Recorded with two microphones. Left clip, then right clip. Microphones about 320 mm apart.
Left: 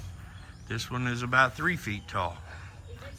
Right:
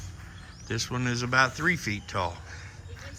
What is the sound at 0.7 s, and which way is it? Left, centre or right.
Speech, centre.